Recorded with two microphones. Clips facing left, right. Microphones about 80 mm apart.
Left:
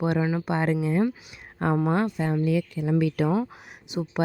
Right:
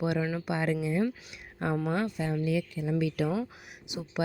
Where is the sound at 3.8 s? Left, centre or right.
Left.